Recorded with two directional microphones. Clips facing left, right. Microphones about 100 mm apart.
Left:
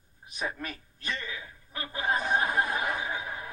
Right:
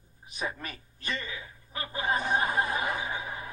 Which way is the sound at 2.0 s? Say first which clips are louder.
Even; centre (ahead or behind).